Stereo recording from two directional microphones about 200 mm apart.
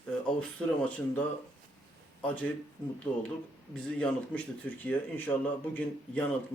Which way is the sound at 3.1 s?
20° left (ahead or behind).